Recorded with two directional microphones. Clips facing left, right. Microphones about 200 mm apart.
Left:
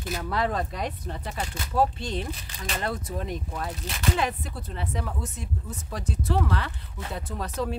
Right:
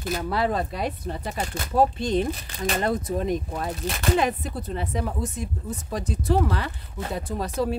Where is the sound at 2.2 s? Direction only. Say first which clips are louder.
Right 8 dB; 50° right (ahead or behind).